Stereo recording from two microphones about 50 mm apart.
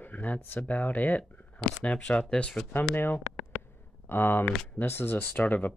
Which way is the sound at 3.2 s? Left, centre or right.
Centre.